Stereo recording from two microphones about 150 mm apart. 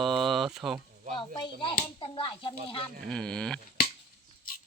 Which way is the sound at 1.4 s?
30° left (ahead or behind).